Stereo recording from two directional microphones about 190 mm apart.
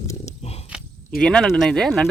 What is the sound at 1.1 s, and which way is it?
Speech, 5° left (ahead or behind).